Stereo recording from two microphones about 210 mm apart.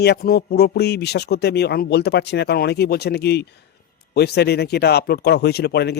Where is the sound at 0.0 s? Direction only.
50° left (ahead or behind).